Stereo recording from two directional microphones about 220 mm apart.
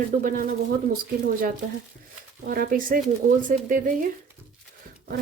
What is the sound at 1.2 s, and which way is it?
A woman's voice, 40° right (ahead or behind).